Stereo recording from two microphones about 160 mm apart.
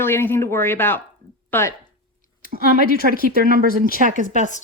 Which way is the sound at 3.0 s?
60° right (ahead or behind).